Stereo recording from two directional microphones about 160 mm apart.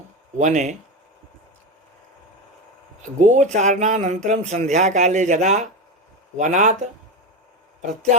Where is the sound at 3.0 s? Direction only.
50° right (ahead or behind).